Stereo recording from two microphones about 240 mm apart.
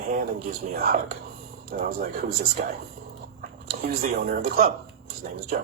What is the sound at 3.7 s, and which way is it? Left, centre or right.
Speech, right.